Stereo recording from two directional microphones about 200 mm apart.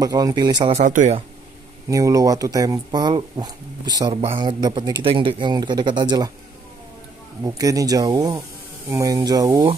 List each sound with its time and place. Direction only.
0.0 s speech: 20° right (ahead or behind)
0.7 s speech: 40° right (ahead or behind)
1.9 s speech: 15° right (ahead or behind)
7.4 s speech: 15° right (ahead or behind)